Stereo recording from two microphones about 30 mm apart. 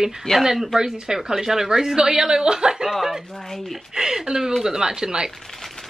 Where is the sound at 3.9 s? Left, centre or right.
Centre.